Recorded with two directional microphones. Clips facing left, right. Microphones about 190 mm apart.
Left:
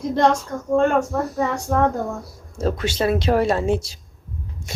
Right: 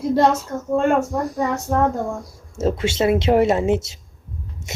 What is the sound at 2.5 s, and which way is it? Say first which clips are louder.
A woman's voice: right 2 dB; 25° right (ahead or behind).